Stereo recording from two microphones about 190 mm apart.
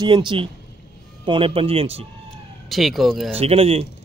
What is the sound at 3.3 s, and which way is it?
Speech, 30° right (ahead or behind).